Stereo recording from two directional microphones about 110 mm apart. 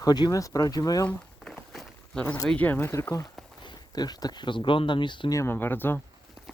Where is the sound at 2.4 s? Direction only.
15° left (ahead or behind); by 3.3 s 30° left (ahead or behind).